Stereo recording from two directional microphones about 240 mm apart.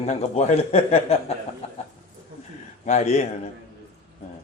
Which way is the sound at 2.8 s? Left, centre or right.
Left.